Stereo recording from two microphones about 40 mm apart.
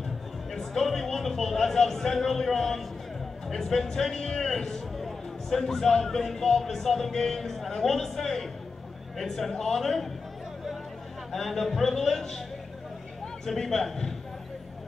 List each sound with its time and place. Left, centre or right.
0.5 s a sound: centre
3.4 s a man's voice: centre
4.9 s a man's voice: centre
11.3 s speech: centre
13.5 s a man's voice: centre